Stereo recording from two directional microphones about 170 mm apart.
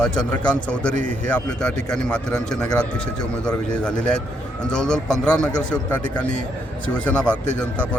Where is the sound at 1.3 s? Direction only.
5° left (ahead or behind).